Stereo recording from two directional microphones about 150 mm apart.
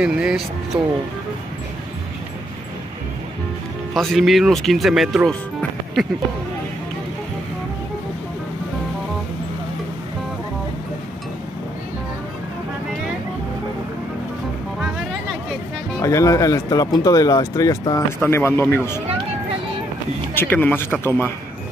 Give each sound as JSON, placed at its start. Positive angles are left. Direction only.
{"t": 0.0, "sound": "speech", "side_deg": -5}
{"t": 3.9, "sound": "speech", "side_deg": 0}
{"t": 16.0, "sound": "speech", "side_deg": 20}
{"t": 20.3, "sound": "a man's voice", "side_deg": 10}